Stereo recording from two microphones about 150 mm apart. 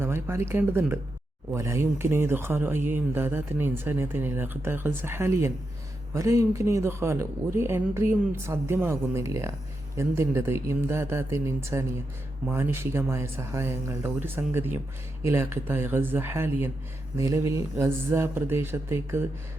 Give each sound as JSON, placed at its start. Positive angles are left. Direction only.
{"t": 0.0, "sound": "speech", "side_deg": -15}